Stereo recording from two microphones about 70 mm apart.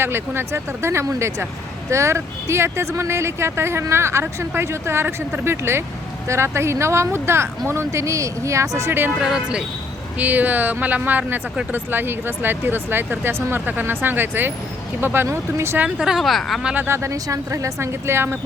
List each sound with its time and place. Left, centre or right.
0.0 s a woman's voice: right
8.9 s speech: right
9.2 s speech: centre
10.2 s speech: right
15.8 s speech: centre
16.7 s speech: right
17.1 s a woman's voice: right